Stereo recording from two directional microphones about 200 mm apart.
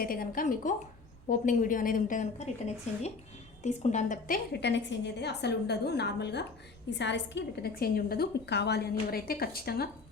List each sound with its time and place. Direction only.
0.0 s a woman's voice: 45° left (ahead or behind)
4.6 s a woman's voice: 60° left (ahead or behind)